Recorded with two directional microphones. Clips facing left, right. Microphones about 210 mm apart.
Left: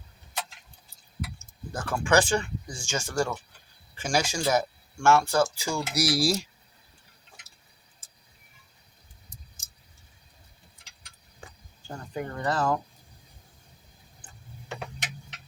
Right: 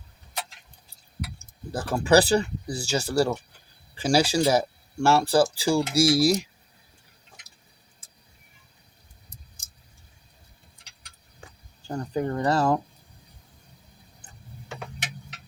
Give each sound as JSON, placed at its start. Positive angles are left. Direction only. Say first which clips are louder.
{"t": 1.7, "sound": "speech", "louder": "right 4 dB", "side_deg": -35}
{"t": 11.9, "sound": "speech", "louder": "right 7 dB", "side_deg": -35}